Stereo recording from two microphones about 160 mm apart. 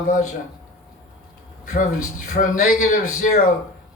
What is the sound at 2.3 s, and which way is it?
Speech, 55° left (ahead or behind).